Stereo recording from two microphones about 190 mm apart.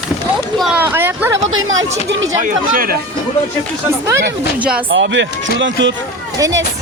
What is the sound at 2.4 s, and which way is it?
Speech, 50° right (ahead or behind).